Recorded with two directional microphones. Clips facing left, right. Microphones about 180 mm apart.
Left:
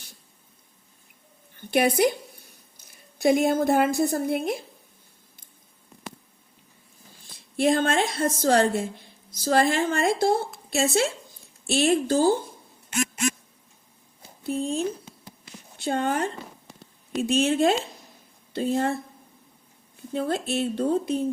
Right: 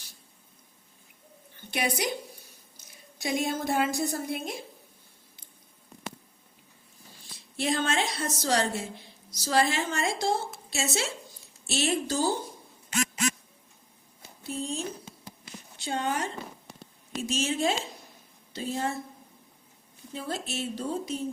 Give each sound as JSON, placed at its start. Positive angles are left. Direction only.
{"t": 1.5, "sound": "a woman's voice", "side_deg": 55}
{"t": 7.3, "sound": "a woman's voice", "side_deg": 50}
{"t": 14.4, "sound": "speech", "side_deg": 55}
{"t": 20.1, "sound": "speech", "side_deg": 55}